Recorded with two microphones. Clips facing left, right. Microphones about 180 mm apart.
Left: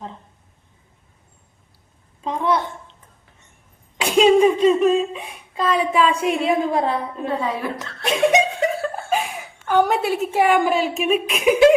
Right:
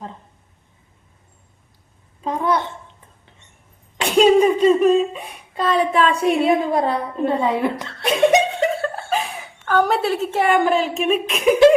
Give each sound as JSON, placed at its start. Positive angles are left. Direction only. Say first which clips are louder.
{"t": 2.2, "sound": "a woman's voice", "louder": "even", "side_deg": -5}
{"t": 3.9, "sound": "speech", "louder": "right 1 dB", "side_deg": 0}
{"t": 7.4, "sound": "a woman's voice", "louder": "right 5 dB", "side_deg": -25}
{"t": 8.0, "sound": "speech", "louder": "right 2 dB", "side_deg": 0}
{"t": 8.8, "sound": "chuckle", "louder": "even", "side_deg": 5}
{"t": 11.0, "sound": "speech", "louder": "even", "side_deg": 5}